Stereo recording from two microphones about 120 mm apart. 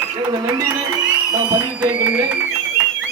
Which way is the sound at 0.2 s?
35° right (ahead or behind).